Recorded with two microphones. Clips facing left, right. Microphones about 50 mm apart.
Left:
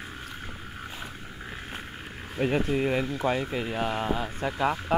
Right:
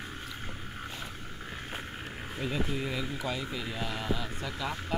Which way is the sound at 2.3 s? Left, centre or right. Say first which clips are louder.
Left 8 dB; left.